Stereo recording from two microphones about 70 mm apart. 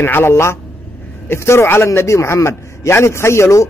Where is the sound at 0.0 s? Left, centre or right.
Left.